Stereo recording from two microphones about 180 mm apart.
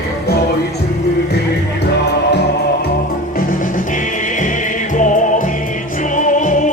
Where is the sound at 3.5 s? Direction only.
45° left (ahead or behind).